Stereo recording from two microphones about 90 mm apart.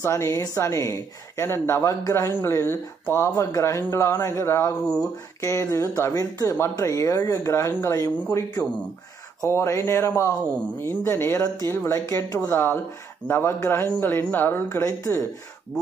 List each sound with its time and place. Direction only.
0.0 s speech: 35° left (ahead or behind)
4.8 s speech: 10° left (ahead or behind)
5.4 s speech: 30° left (ahead or behind)
9.5 s a woman's voice: 30° left (ahead or behind)